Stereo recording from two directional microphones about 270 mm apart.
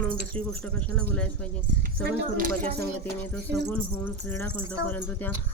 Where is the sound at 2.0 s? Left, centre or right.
Right.